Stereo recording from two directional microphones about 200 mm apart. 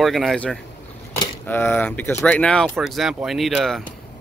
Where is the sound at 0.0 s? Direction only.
Centre (ahead or behind).